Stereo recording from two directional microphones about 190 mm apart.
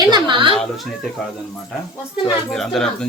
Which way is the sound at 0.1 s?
25° right (ahead or behind).